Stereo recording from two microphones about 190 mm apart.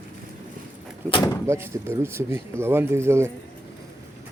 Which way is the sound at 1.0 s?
25° left (ahead or behind).